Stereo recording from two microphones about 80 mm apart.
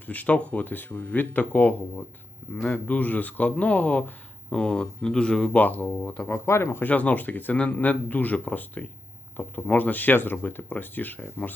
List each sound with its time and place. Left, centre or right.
0.1 s speech: centre
6.2 s speech: left